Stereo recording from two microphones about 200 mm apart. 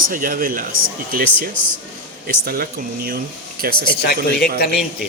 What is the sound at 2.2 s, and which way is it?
Speech, 50° right (ahead or behind).